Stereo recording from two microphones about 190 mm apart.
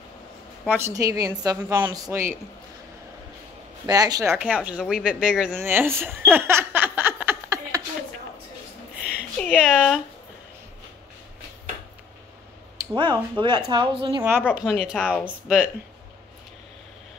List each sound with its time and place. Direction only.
0.7 s a woman's voice: 15° right (ahead or behind)
3.8 s speech: 20° right (ahead or behind)
9.4 s speech: 5° right (ahead or behind)
12.7 s a woman's voice: 25° right (ahead or behind)
14.5 s speech: 5° right (ahead or behind)